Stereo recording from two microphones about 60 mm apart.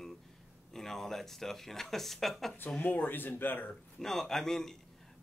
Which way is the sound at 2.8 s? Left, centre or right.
Left.